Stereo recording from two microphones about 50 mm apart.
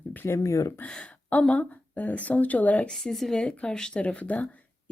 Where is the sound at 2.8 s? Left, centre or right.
Centre.